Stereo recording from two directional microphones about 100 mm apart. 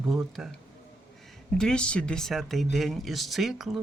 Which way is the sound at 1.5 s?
5° left (ahead or behind).